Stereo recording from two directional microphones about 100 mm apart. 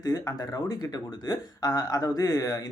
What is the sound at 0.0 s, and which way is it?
Speech, 35° left (ahead or behind).